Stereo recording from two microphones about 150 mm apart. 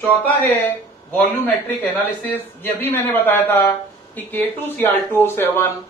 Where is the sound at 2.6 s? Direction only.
15° left (ahead or behind).